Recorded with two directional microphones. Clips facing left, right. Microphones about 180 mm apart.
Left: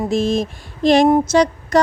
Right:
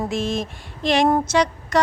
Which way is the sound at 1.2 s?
40° left (ahead or behind).